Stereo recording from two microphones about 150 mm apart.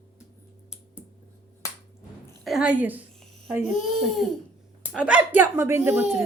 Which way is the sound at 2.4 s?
5° right (ahead or behind).